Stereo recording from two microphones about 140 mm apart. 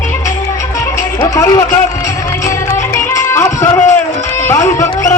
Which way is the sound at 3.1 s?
20° left (ahead or behind).